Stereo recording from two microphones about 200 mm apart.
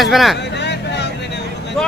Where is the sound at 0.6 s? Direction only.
60° left (ahead or behind).